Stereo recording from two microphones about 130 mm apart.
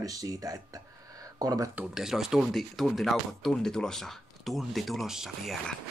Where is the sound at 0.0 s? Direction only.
25° right (ahead or behind).